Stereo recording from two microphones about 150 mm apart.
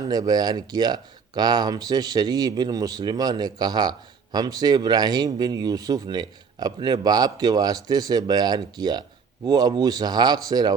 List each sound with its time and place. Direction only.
0.0 s speech: 25° right (ahead or behind)